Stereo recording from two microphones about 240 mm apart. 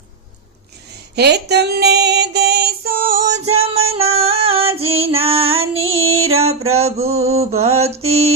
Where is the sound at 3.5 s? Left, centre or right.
Right.